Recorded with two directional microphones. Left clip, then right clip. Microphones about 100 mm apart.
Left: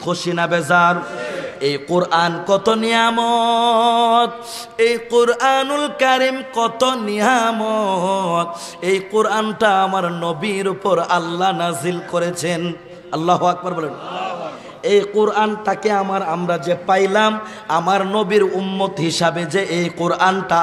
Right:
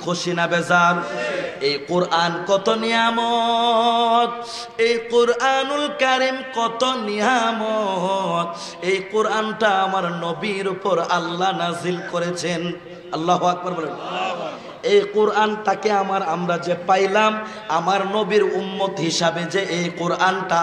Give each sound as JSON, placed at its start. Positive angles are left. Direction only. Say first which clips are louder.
{"t": 0.0, "sound": "speech", "louder": "left 2 dB", "side_deg": 35}
{"t": 1.6, "sound": "music", "louder": "left 4 dB", "side_deg": 50}